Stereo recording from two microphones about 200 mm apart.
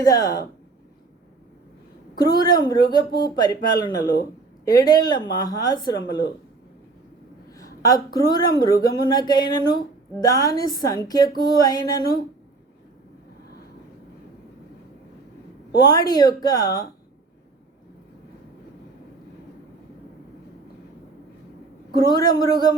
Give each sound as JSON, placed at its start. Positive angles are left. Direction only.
{"t": 0.0, "sound": "speech", "side_deg": 20}
{"t": 2.1, "sound": "speech", "side_deg": 20}
{"t": 7.5, "sound": "speech", "side_deg": 15}
{"t": 15.8, "sound": "speech", "side_deg": 20}
{"t": 22.0, "sound": "speech", "side_deg": 20}